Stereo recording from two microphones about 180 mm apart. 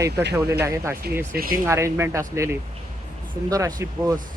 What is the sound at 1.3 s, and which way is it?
Speech, 55° right (ahead or behind).